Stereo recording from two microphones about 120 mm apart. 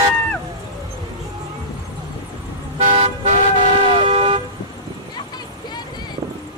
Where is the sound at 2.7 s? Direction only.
65° right (ahead or behind).